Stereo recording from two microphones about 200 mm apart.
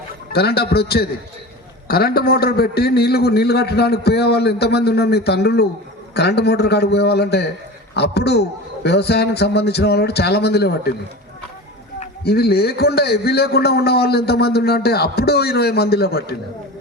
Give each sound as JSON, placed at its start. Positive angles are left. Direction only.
{"t": 0.3, "sound": "a man's voice", "side_deg": 55}
{"t": 12.2, "sound": "a man's voice", "side_deg": 50}